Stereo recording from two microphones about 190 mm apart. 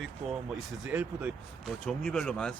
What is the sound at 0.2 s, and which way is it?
Speech, 35° right (ahead or behind).